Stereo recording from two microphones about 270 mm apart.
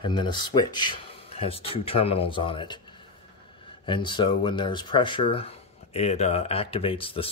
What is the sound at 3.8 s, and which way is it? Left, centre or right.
Speech, centre.